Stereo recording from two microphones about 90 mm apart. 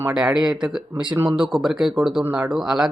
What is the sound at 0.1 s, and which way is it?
Speech, 5° right (ahead or behind).